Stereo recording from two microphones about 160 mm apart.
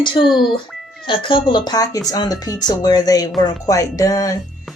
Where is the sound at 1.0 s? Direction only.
30° left (ahead or behind).